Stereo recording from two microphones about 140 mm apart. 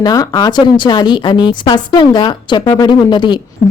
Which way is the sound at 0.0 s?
25° left (ahead or behind).